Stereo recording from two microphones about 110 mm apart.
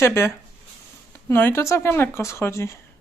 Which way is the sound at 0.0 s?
25° left (ahead or behind).